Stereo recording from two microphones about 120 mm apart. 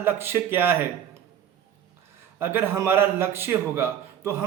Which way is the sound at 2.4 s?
20° right (ahead or behind).